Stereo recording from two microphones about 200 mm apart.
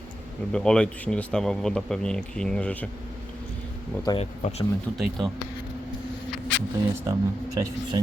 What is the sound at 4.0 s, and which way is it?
Speech, 20° left (ahead or behind).